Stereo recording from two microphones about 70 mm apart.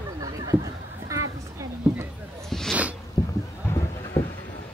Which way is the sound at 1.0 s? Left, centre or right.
Right.